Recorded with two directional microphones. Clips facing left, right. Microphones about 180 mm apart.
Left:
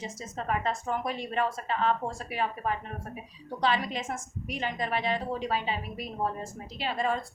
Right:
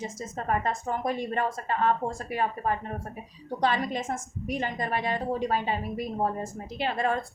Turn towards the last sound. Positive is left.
turn(degrees=-55)  # may be behind; listen again after turning